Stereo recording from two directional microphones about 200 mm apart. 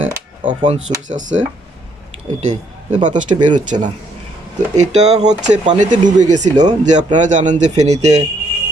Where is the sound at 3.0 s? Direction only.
40° right (ahead or behind).